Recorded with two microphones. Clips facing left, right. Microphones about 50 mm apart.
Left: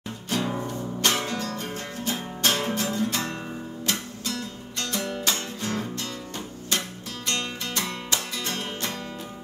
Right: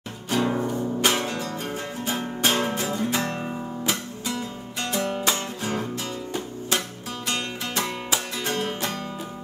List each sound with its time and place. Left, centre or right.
0.4 s music: right
0.7 s music: centre